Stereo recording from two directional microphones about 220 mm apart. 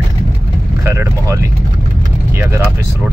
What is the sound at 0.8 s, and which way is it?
Speech, 10° right (ahead or behind).